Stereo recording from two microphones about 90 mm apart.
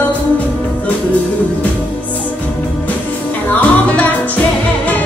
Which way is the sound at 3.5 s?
20° left (ahead or behind).